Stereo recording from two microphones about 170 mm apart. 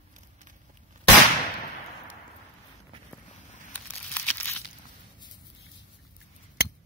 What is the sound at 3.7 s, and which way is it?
Crumpling, 10° left (ahead or behind).